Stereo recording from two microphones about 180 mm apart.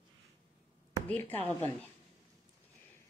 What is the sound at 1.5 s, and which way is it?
Speech, 10° left (ahead or behind).